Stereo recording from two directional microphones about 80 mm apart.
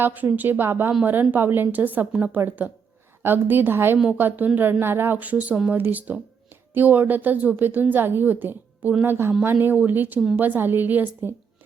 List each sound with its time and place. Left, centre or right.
0.0 s a woman's voice: right
9.0 s a woman's voice: right